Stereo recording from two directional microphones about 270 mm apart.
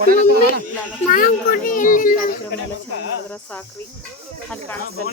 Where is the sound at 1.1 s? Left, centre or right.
Left.